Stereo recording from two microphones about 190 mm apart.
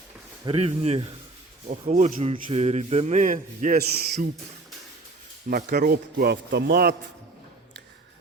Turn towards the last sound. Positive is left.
turn(degrees=-55)  # may be behind; listen again after turning